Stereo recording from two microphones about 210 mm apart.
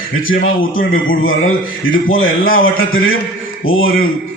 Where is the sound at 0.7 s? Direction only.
70° left (ahead or behind).